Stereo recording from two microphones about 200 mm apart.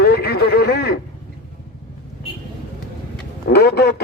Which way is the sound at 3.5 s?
55° left (ahead or behind).